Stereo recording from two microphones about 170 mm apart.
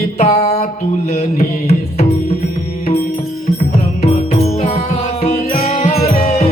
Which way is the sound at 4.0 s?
40° left (ahead or behind).